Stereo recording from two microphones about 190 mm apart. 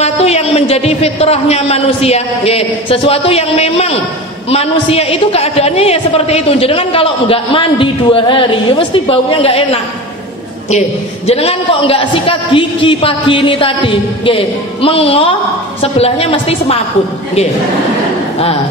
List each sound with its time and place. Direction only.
0.0 s a man's voice: 35° left (ahead or behind)
11.2 s a man's voice: 30° left (ahead or behind)